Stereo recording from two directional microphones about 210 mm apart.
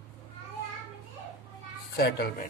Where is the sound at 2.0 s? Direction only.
50° left (ahead or behind).